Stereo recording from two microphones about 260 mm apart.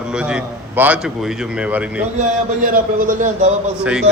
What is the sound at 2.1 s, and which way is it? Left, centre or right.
A man's voice, right.